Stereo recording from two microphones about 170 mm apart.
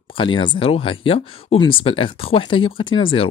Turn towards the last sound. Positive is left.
turn(degrees=30)  # may be behind; listen again after turning